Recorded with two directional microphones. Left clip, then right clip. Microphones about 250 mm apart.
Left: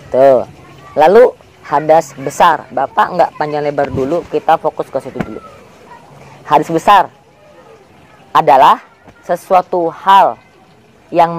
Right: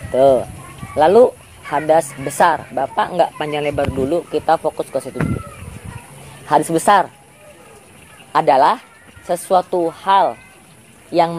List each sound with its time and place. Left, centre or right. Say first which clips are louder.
0.1 s speech: left 4 dB; centre
6.4 s speech: left 4 dB; centre
8.3 s speech: left 6 dB; centre
11.1 s speech: left 5 dB; left